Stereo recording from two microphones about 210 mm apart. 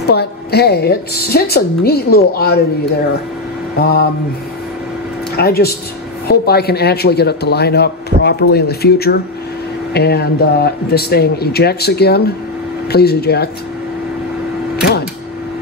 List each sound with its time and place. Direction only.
0.0 s speech: 50° left (ahead or behind)
3.8 s speech: 50° left (ahead or behind)
5.3 s speech: 50° left (ahead or behind)